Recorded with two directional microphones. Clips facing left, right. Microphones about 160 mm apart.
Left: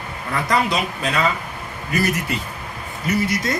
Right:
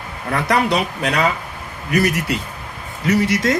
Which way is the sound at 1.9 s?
80° right.